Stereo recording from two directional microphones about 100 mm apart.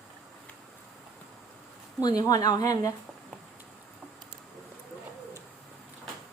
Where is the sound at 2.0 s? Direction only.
40° left (ahead or behind).